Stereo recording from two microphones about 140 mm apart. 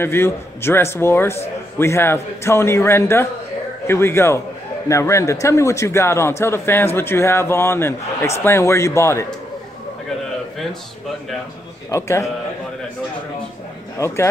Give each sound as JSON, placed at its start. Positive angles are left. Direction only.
{"t": 0.0, "sound": "a man's voice", "side_deg": 15}
{"t": 11.9, "sound": "a man's voice", "side_deg": 20}
{"t": 13.9, "sound": "a man's voice", "side_deg": 20}